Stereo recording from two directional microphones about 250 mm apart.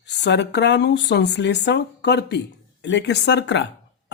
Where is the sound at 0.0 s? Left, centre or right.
Left.